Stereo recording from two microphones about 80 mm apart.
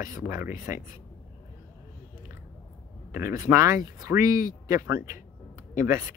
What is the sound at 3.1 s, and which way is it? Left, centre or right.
Speech, right.